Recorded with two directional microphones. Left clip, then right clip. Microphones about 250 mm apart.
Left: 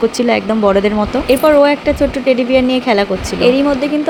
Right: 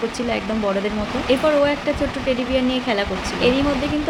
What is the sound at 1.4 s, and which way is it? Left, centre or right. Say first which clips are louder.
Speech: left 9 dB; left.